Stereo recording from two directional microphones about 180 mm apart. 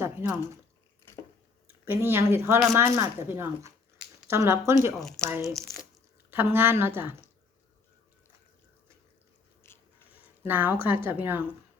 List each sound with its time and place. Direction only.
0.0 s a sound: 15° right (ahead or behind)
1.6 s a woman's voice: 10° right (ahead or behind)
4.9 s speech: 5° left (ahead or behind)
6.3 s a woman's voice: 10° right (ahead or behind)
9.7 s biting: 15° left (ahead or behind)
10.4 s a woman's voice: 10° right (ahead or behind)